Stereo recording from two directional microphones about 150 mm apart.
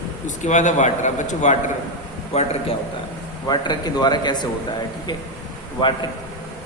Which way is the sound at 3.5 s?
30° left (ahead or behind).